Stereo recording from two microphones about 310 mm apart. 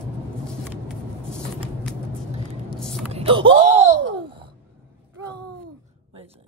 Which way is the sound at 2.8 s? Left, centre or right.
Centre.